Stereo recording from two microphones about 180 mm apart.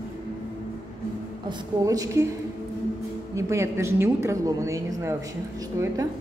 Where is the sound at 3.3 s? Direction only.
15° right (ahead or behind).